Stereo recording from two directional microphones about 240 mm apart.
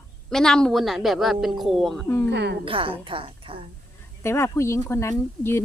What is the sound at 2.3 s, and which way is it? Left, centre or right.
Speech, right.